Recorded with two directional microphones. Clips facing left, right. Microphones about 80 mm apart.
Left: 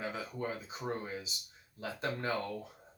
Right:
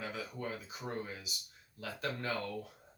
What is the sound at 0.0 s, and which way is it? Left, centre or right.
Speech, left.